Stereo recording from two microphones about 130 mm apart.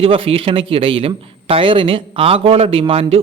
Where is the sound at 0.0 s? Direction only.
45° right (ahead or behind).